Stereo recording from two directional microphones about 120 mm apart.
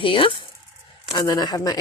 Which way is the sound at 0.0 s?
45° left (ahead or behind).